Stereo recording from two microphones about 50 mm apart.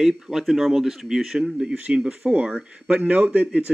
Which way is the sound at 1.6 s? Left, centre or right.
Centre.